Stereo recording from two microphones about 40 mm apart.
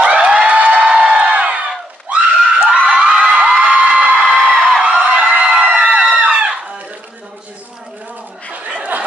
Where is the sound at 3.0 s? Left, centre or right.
Right.